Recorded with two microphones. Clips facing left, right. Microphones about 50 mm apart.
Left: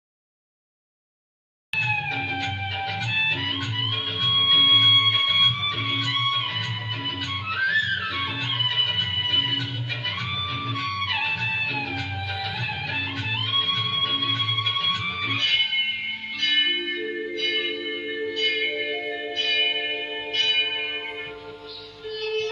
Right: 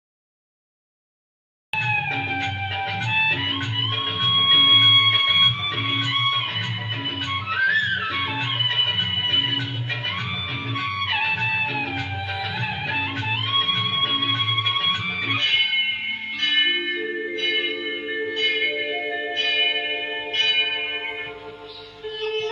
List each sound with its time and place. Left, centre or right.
1.8 s music: centre
22.2 s music: right